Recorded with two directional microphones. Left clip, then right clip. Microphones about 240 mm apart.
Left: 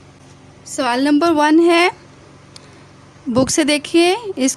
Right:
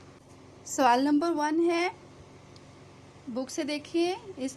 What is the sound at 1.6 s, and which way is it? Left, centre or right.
Speech, left.